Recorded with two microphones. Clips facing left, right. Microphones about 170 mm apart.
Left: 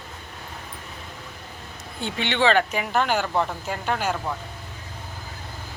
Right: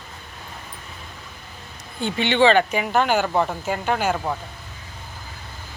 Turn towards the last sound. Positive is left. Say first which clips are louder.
# right 4 dB
turn(degrees=-5)  # may be behind; listen again after turning